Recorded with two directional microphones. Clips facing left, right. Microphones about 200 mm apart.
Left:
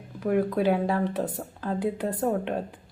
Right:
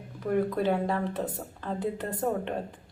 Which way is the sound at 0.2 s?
5° left (ahead or behind).